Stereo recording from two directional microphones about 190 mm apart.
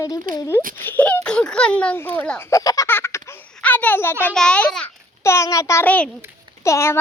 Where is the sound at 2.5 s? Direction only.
15° left (ahead or behind).